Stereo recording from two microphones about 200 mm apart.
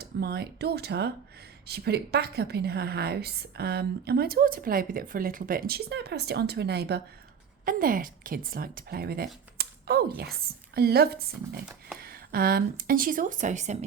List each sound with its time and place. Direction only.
0.0 s a woman's voice: 50° right (ahead or behind)
7.6 s a woman's voice: 45° right (ahead or behind)